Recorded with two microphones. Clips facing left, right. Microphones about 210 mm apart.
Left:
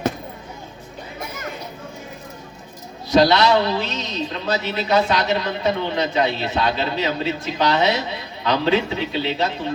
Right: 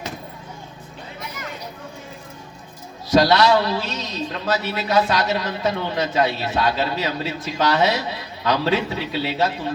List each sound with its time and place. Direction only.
3.2 s a man's voice: 20° left (ahead or behind)